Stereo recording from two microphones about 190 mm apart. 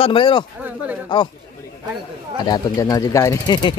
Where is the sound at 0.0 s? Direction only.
25° left (ahead or behind).